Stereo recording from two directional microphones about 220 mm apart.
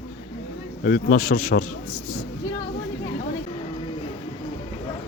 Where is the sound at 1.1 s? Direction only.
45° left (ahead or behind).